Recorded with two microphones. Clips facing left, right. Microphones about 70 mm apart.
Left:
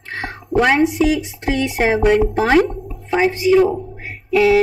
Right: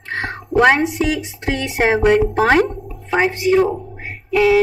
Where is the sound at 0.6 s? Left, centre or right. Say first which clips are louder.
Even; right.